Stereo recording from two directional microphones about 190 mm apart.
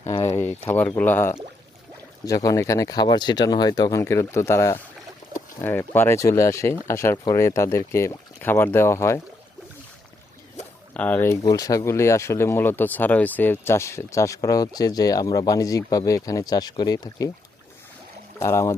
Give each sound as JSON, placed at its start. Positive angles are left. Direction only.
{"t": 0.3, "sound": "speech", "side_deg": 10}
{"t": 10.9, "sound": "speech", "side_deg": 10}
{"t": 18.3, "sound": "speech", "side_deg": 15}